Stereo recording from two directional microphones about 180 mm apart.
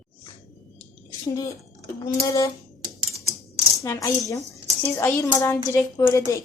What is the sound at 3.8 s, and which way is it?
A woman's voice, 15° left (ahead or behind).